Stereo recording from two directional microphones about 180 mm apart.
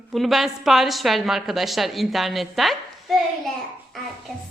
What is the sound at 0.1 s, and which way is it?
A woman's voice, centre (ahead or behind).